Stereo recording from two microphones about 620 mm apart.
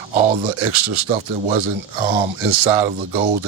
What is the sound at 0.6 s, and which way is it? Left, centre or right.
Speech, right.